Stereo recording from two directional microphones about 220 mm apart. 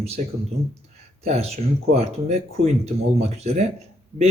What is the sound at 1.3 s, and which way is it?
Speech, 30° right (ahead or behind).